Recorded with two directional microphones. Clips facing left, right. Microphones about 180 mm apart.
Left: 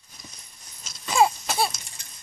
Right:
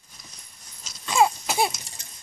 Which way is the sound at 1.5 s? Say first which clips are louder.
Right 2 dB; 15° right (ahead or behind).